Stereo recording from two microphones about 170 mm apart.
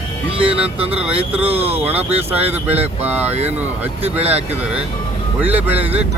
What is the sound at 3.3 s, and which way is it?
Speech, 40° right (ahead or behind).